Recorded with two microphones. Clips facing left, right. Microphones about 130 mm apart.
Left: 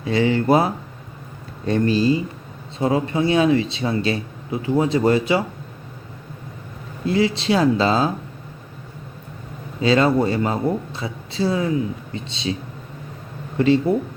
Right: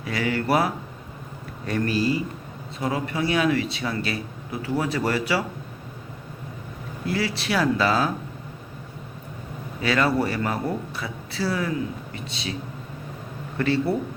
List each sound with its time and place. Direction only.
0.0 s speech: 25° left (ahead or behind)
7.0 s speech: 20° left (ahead or behind)
9.8 s speech: 25° left (ahead or behind)
13.6 s speech: 20° left (ahead or behind)